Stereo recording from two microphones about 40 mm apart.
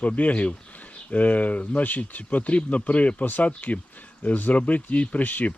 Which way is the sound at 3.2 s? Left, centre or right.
Left.